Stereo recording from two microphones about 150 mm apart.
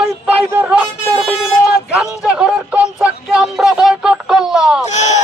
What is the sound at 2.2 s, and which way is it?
Speech, 5° right (ahead or behind).